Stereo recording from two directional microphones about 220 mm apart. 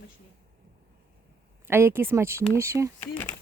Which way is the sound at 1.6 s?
10° right (ahead or behind).